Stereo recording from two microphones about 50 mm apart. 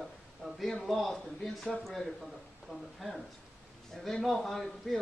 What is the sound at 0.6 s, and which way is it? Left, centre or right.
A man's voice, centre.